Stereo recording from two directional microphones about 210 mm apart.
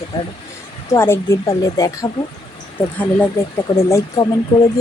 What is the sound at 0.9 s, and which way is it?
Speech, 10° left (ahead or behind).